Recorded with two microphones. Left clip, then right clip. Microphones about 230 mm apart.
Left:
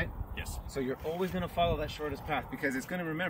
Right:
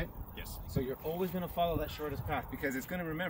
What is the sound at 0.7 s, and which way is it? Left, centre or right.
Speech, centre.